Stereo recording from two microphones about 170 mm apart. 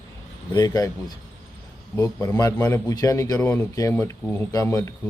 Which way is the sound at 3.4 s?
10° left (ahead or behind).